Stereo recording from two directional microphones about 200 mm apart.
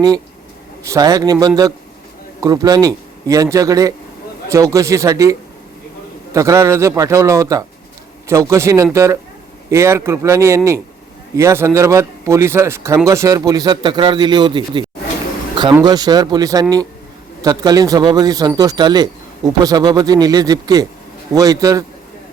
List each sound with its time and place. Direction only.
0.9 s a man's voice: 20° right (ahead or behind)